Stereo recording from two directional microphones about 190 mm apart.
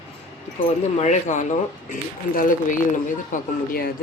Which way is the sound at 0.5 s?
35° left (ahead or behind).